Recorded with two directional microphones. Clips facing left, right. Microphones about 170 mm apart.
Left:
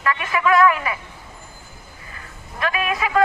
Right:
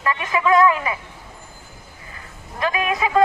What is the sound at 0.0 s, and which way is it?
Speech, 20° right (ahead or behind).